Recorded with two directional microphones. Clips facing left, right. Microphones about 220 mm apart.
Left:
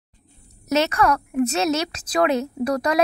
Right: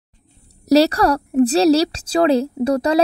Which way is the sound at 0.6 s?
35° right (ahead or behind).